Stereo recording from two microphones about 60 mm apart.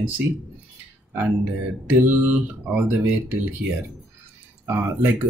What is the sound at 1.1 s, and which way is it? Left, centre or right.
Speech, right.